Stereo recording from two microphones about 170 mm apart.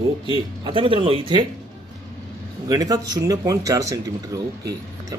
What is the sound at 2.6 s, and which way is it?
Speech, 20° right (ahead or behind).